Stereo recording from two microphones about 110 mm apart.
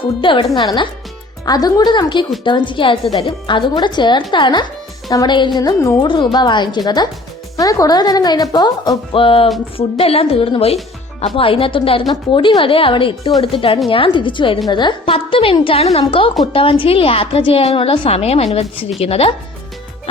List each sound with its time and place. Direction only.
0.0 s a woman's voice: 50° left (ahead or behind); by 6.0 s 30° left (ahead or behind)
6.0 s a woman's voice: 45° left (ahead or behind)
15.1 s a woman's voice: 55° left (ahead or behind)